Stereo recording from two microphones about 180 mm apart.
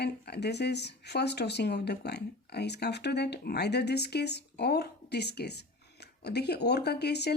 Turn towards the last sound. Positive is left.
turn(degrees=65)  # may be behind; listen again after turning